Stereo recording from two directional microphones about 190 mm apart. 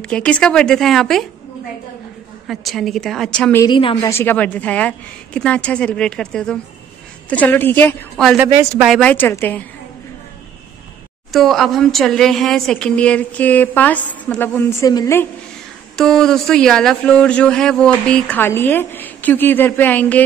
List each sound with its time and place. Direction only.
0.0 s a woman's voice: 5° left (ahead or behind)
2.4 s a woman's voice: centre (ahead or behind)
3.6 s a woman's voice: 25° left (ahead or behind)
4.0 s speech: 10° left (ahead or behind)
8.5 s speech: 15° right (ahead or behind)
8.8 s a woman's voice: 5° right (ahead or behind)
9.1 s speech: 10° left (ahead or behind)
11.3 s a woman's voice: centre (ahead or behind); by 15.2 s 15° left (ahead or behind)
16.0 s speech: centre (ahead or behind)